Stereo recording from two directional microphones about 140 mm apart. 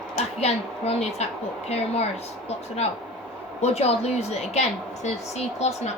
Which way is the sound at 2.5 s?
50° left (ahead or behind).